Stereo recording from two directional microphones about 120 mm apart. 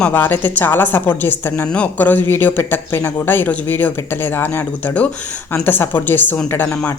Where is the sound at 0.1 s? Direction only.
15° left (ahead or behind).